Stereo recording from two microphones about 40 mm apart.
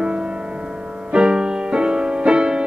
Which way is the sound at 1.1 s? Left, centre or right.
Right.